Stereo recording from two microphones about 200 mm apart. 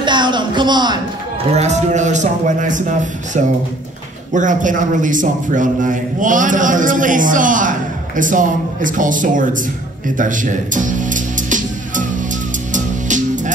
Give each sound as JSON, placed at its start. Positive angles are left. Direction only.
{"t": 0.0, "sound": "a sound", "side_deg": -20}
{"t": 1.5, "sound": "a man's voice", "side_deg": -35}
{"t": 10.0, "sound": "music", "side_deg": -40}